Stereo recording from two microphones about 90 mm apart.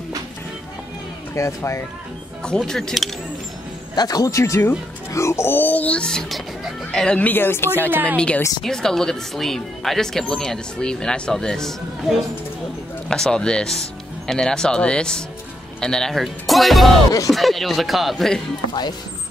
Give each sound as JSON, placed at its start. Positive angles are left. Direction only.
{"t": 1.3, "sound": "speech", "side_deg": 30}
{"t": 2.4, "sound": "speech", "side_deg": 5}
{"t": 3.9, "sound": "speech", "side_deg": 45}
{"t": 7.9, "sound": "a woman's voice", "side_deg": -20}
{"t": 8.6, "sound": "speech", "side_deg": 5}
{"t": 18.7, "sound": "speech", "side_deg": 50}